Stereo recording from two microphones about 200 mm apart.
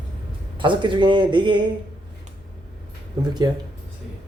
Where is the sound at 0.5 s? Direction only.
25° right (ahead or behind).